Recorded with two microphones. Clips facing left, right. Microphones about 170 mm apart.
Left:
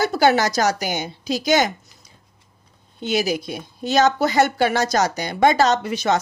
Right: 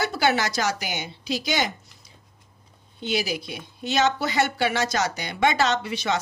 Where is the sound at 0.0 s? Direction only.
40° left (ahead or behind).